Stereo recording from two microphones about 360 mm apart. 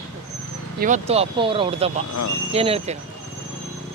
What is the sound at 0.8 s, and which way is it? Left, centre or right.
Speech, centre.